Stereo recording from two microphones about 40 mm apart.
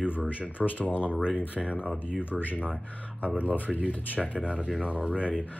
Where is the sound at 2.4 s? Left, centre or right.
Left.